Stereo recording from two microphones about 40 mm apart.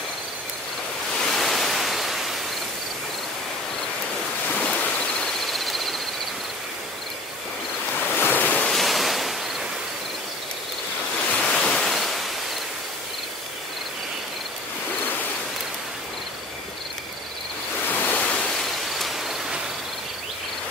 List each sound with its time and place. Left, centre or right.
1.1 s waves: centre
4.9 s owl: left
5.5 s owl: centre
8.0 s waves: left
8.7 s waves: centre
11.1 s waves: left
11.4 s ocean: centre
17.8 s waves: left
18.1 s waves: left
18.6 s a sound: centre